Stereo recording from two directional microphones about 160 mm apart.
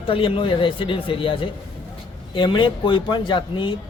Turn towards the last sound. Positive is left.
turn(degrees=30)  # may be behind; listen again after turning